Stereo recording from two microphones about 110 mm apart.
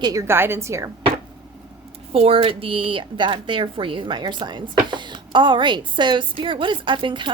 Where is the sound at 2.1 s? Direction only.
60° right (ahead or behind).